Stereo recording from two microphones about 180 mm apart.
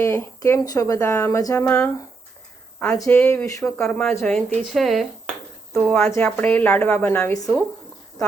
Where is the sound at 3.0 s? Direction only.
15° left (ahead or behind).